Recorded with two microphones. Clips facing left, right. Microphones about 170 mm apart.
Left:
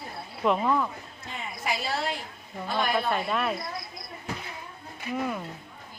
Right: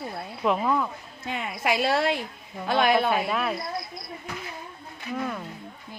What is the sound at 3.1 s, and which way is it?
Speech, centre (ahead or behind).